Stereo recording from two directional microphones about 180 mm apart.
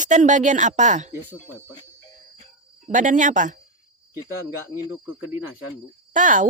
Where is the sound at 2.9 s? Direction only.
45° right (ahead or behind).